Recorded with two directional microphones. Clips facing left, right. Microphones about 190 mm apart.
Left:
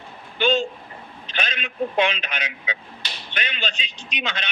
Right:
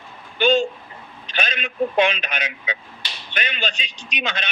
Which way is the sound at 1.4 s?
50° right (ahead or behind).